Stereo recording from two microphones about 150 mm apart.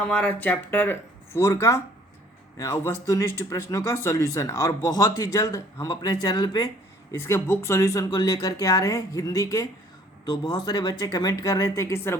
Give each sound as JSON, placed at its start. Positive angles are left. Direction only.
{"t": 0.0, "sound": "speech", "side_deg": 10}
{"t": 7.1, "sound": "speech", "side_deg": 20}